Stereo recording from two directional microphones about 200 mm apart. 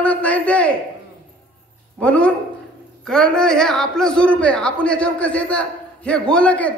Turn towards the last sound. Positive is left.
turn(degrees=5)  # may be behind; listen again after turning